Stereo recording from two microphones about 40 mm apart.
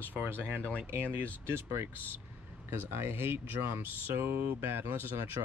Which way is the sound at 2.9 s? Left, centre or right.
Right.